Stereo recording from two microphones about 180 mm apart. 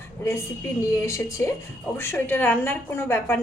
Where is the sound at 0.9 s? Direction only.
15° left (ahead or behind).